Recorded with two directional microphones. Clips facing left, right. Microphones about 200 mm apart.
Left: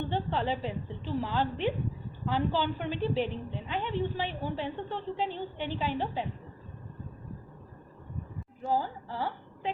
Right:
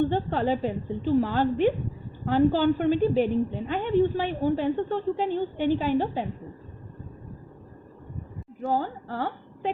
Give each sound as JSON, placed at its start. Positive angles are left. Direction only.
{"t": 0.1, "sound": "a woman's voice", "side_deg": -50}
{"t": 8.6, "sound": "a woman's voice", "side_deg": -60}